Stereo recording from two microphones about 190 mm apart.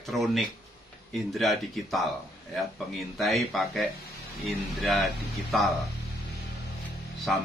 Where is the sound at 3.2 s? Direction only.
Centre (ahead or behind).